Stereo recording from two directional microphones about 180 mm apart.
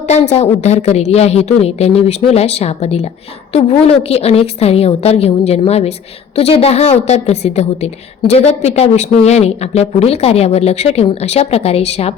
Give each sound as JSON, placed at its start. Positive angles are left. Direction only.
{"t": 0.1, "sound": "speech", "side_deg": 35}